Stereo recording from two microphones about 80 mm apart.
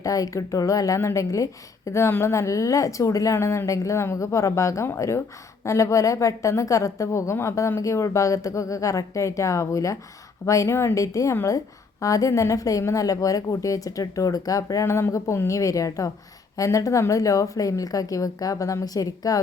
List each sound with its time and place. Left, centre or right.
0.0 s a woman's voice: left